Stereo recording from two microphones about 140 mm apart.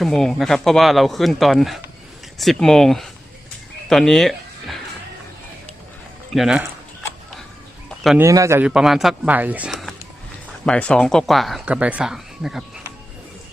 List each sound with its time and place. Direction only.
0.0 s speech: 5° left (ahead or behind)
6.3 s speech: 5° right (ahead or behind)
7.9 s chicken: centre (ahead or behind)
8.2 s a man's voice: 20° right (ahead or behind)
8.6 s speech: 5° right (ahead or behind)
10.7 s speech: 5° left (ahead or behind)